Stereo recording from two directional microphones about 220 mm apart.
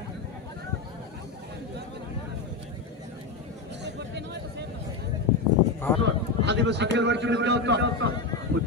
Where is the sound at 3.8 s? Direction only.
50° right (ahead or behind).